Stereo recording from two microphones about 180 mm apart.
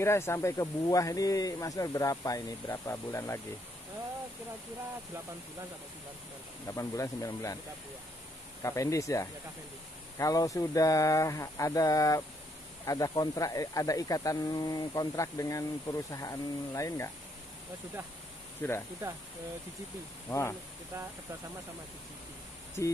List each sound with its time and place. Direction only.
0.0 s speech: 15° left (ahead or behind)
6.7 s speech: 15° left (ahead or behind)
8.6 s speech: 15° left (ahead or behind)
18.6 s speech: 10° left (ahead or behind)
20.2 s speech: 15° left (ahead or behind)